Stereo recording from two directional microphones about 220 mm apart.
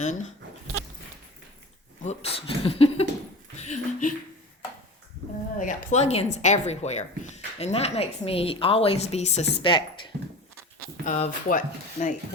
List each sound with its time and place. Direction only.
0.0 s speech: 35° left (ahead or behind)
2.0 s speech: 25° left (ahead or behind)
5.5 s speech: 35° left (ahead or behind)
11.0 s speech: 35° left (ahead or behind)